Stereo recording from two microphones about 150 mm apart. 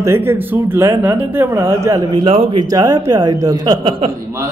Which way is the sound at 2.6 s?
25° right (ahead or behind).